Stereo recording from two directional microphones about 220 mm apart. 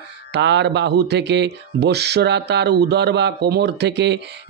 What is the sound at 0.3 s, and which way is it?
Speech, 50° right (ahead or behind).